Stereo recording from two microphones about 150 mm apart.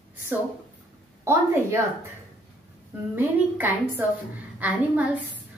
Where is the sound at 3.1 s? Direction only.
15° right (ahead or behind).